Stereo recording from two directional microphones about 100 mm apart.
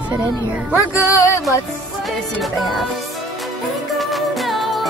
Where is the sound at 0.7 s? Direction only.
30° left (ahead or behind).